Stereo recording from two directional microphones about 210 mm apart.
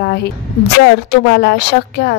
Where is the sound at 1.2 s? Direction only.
55° left (ahead or behind).